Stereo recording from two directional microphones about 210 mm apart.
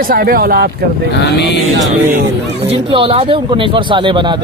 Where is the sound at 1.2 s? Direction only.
55° left (ahead or behind).